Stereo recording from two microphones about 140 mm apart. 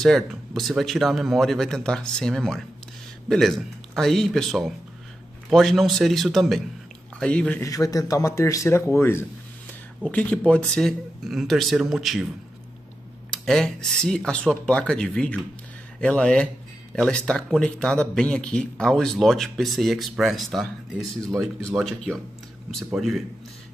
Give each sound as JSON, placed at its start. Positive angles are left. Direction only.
{"t": 0.0, "sound": "a man's voice", "side_deg": 0}
{"t": 7.6, "sound": "a man's voice", "side_deg": 25}
{"t": 13.3, "sound": "a man's voice", "side_deg": 5}